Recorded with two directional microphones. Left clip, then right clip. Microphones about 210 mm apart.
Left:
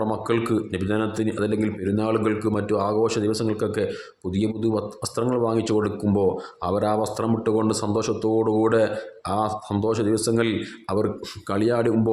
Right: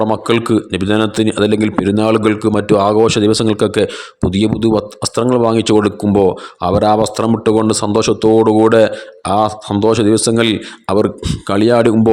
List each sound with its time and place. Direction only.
0.0 s a man's voice: 40° right (ahead or behind)